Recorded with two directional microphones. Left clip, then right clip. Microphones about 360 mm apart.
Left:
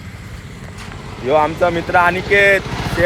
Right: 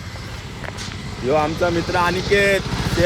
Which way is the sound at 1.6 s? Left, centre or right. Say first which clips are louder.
Left 4 dB; centre.